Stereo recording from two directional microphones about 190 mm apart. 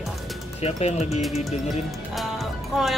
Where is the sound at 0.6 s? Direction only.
35° left (ahead or behind).